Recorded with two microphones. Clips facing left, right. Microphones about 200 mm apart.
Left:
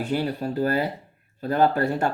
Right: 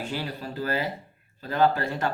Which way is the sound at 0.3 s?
45° left (ahead or behind).